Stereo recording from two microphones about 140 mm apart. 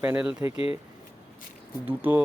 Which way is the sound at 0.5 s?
40° left (ahead or behind).